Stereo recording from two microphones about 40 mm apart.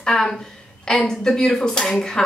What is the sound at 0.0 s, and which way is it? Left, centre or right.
A woman's voice, centre.